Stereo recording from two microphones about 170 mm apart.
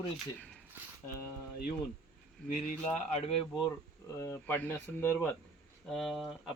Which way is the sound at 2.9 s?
40° left (ahead or behind).